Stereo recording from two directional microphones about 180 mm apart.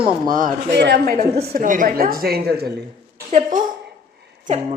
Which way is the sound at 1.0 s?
50° right (ahead or behind).